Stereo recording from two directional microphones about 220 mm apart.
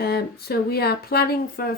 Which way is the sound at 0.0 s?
45° left (ahead or behind).